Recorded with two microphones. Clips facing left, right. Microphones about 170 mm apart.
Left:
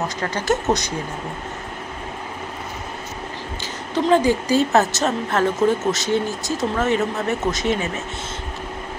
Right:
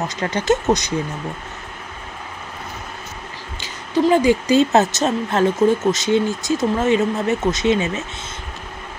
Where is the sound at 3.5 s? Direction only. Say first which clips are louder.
Right 4 dB; 10° right (ahead or behind).